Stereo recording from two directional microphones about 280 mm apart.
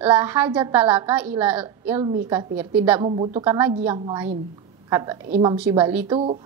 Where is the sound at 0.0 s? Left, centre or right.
Centre.